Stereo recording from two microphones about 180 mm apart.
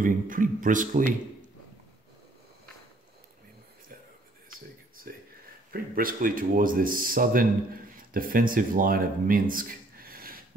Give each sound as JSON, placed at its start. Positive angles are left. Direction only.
{"t": 0.0, "sound": "speech", "side_deg": -50}
{"t": 5.1, "sound": "a sound", "side_deg": -55}
{"t": 5.7, "sound": "speech", "side_deg": -50}